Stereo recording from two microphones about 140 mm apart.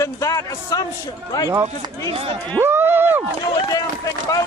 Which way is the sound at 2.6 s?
15° right (ahead or behind).